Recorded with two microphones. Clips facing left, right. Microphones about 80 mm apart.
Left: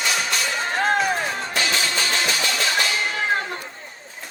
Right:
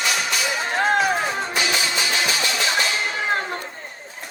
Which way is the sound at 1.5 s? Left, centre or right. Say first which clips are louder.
Right 1 dB; centre.